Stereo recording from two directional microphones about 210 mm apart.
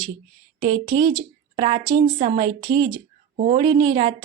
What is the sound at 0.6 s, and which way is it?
A woman's voice, 25° right (ahead or behind).